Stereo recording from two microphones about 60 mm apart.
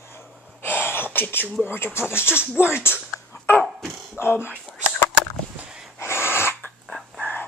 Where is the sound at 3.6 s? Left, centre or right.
Centre.